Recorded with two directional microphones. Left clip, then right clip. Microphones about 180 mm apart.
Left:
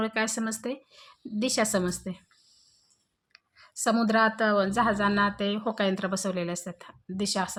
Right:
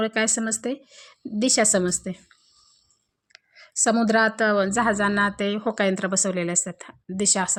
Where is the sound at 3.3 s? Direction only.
35° right (ahead or behind).